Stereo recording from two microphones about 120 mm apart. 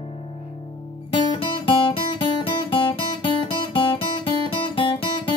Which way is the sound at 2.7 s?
45° left (ahead or behind).